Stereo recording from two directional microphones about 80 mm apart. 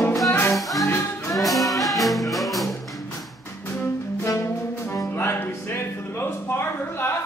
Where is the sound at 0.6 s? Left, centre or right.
Centre.